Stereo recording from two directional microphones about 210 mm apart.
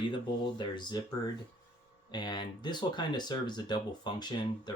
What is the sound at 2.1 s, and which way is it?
Speech, 20° left (ahead or behind).